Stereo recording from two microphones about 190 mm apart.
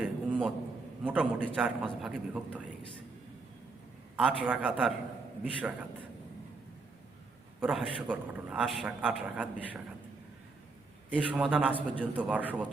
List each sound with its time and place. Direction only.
0.0 s a sound: 5° right (ahead or behind)
1.0 s a man's voice: 5° right (ahead or behind)
4.2 s a man's voice: 5° right (ahead or behind)
7.6 s a man's voice: 5° right (ahead or behind)
11.1 s a man's voice: 5° right (ahead or behind)